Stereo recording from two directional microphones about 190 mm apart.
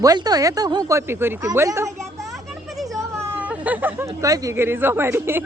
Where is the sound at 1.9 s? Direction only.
Centre (ahead or behind).